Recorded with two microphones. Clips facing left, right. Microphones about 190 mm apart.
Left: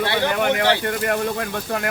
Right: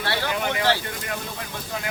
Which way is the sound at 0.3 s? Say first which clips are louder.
Left 3 dB; 60° left (ahead or behind).